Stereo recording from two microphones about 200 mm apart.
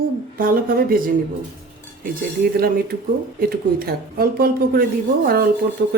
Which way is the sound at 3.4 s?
50° right (ahead or behind).